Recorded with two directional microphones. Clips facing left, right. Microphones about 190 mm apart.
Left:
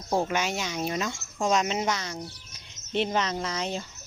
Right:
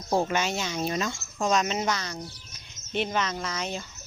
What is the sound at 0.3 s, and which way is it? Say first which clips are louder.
Speech: right 1 dB; 10° left (ahead or behind).